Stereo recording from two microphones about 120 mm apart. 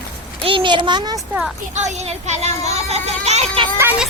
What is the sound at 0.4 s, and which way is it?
Speech, 45° right (ahead or behind).